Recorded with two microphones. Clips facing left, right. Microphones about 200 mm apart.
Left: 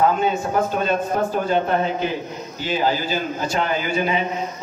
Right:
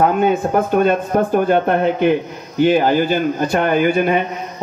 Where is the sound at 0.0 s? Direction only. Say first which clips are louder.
Right 4 dB; 55° right (ahead or behind).